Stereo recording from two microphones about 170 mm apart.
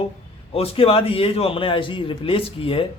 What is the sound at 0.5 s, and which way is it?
A man's voice, 35° left (ahead or behind).